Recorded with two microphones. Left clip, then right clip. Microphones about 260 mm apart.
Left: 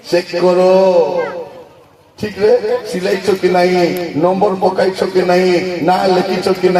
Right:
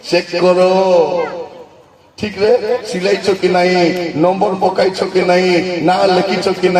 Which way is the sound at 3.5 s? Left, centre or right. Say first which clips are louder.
Even; right.